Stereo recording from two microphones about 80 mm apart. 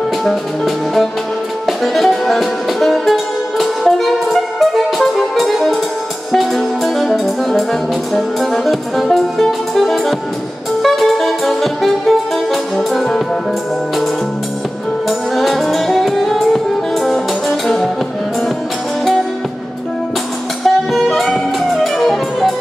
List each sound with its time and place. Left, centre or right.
0.2 s music: centre
10.8 s saxophone: centre
15.0 s music: centre
20.6 s music: centre